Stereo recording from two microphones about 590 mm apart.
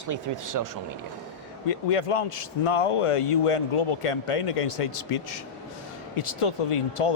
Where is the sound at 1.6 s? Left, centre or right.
Left.